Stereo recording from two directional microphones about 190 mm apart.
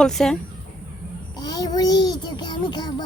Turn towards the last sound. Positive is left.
turn(degrees=20)  # may be behind; listen again after turning